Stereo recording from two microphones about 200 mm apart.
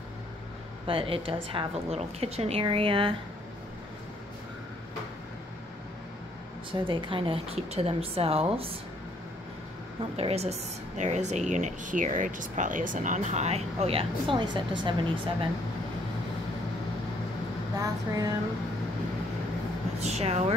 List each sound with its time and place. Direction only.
0.8 s a woman's voice: 25° right (ahead or behind)
6.7 s a woman's voice: 25° right (ahead or behind)
10.1 s a woman's voice: 30° right (ahead or behind)
17.7 s a sound: 20° right (ahead or behind)
20.0 s a woman's voice: 30° right (ahead or behind)